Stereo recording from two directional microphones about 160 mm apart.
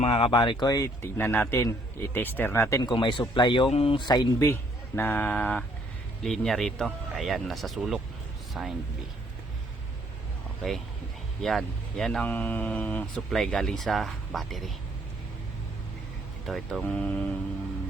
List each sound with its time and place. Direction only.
0.0 s speech: 35° left (ahead or behind); by 2.9 s 20° left (ahead or behind)
2.9 s speech: 30° left (ahead or behind); by 8.7 s centre (ahead or behind)
11.4 s speech: centre (ahead or behind)
16.5 s speech: centre (ahead or behind)